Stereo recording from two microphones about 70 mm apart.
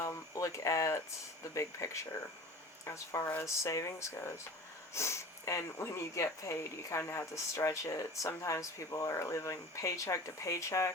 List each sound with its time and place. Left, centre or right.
0.0 s speech: left